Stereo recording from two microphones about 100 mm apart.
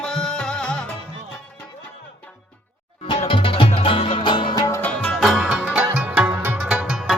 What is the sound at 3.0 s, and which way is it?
Music, 60° left (ahead or behind).